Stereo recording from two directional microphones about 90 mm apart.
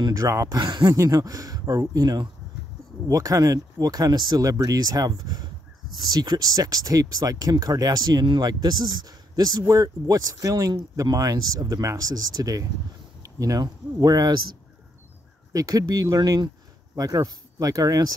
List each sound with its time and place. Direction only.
0.0 s speech: 40° right (ahead or behind)
0.6 s speech: 55° right (ahead or behind)
0.9 s speech: 40° right (ahead or behind)